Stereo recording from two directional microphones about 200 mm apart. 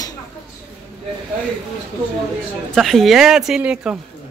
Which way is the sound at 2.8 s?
Centre (ahead or behind).